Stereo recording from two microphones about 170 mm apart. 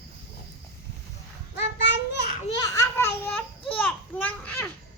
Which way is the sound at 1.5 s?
90° left.